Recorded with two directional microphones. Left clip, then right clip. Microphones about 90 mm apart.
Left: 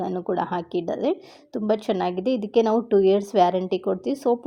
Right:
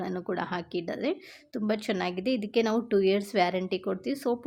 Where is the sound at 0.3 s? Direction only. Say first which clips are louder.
Left 7 dB; 25° left (ahead or behind).